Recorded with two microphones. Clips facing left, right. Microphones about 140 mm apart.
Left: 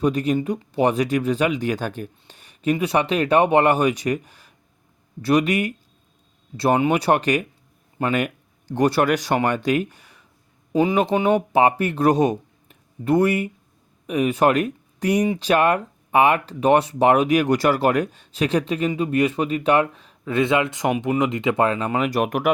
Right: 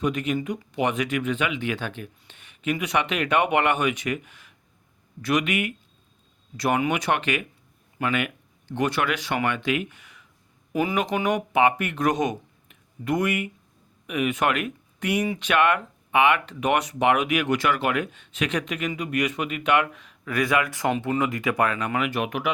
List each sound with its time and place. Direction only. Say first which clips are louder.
0.0 s speech: left 5 dB; 35° left (ahead or behind)
10.7 s speech: left 6 dB; 25° left (ahead or behind); by 22.4 s 45° left (ahead or behind)